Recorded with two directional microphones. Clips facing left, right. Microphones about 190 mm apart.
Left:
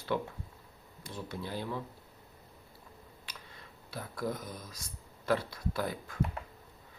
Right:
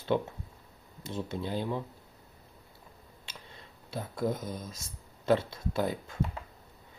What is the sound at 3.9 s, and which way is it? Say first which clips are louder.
Speech: right 4 dB; 25° right (ahead or behind).